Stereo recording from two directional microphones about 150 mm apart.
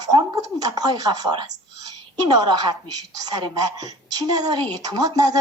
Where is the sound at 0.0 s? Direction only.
25° right (ahead or behind).